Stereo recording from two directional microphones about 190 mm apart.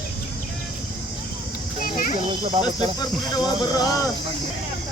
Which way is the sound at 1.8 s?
45° left (ahead or behind).